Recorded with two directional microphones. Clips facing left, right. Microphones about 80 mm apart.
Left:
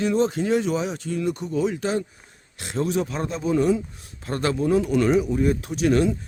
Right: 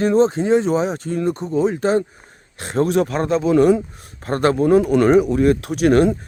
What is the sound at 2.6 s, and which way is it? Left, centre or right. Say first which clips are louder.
A man's voice: right 7 dB; right.